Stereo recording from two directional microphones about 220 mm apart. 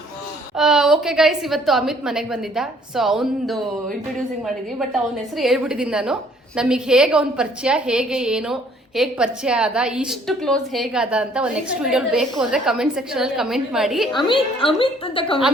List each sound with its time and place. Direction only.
0.5 s a woman's voice: centre (ahead or behind)
5.4 s a woman's voice: centre (ahead or behind)
14.2 s a woman's voice: 20° left (ahead or behind)